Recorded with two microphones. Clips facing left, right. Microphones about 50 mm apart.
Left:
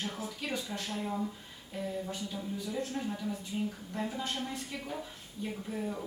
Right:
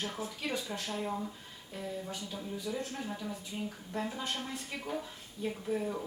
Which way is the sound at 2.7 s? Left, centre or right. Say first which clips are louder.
Left 2 dB; centre.